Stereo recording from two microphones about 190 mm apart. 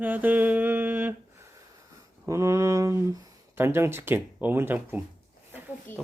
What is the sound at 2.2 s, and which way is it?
Speech, 15° right (ahead or behind).